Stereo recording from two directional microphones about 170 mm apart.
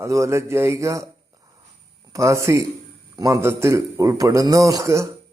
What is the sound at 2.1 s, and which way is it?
A man's voice, 15° right (ahead or behind).